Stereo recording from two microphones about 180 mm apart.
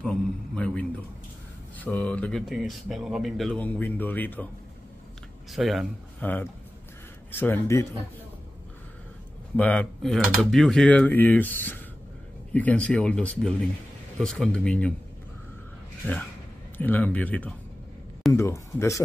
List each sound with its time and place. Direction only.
0.0 s a man's voice: 5° left (ahead or behind)
5.5 s speech: centre (ahead or behind)
6.2 s speech: 10° left (ahead or behind)
9.6 s speech: 5° left (ahead or behind)
16.7 s speech: 10° left (ahead or behind)